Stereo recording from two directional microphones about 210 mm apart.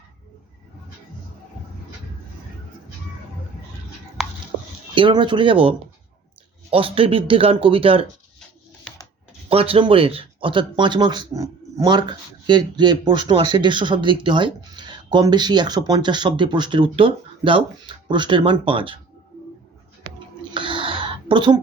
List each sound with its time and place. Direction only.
4.9 s speech: 25° right (ahead or behind)
9.5 s speech: 25° right (ahead or behind)
20.4 s a sound: 25° right (ahead or behind)